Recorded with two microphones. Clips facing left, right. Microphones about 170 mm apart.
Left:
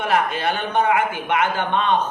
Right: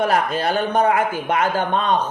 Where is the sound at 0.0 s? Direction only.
40° right (ahead or behind).